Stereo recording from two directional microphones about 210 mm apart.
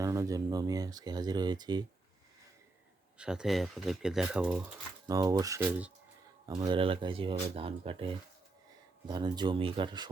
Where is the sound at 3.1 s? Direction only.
5° right (ahead or behind).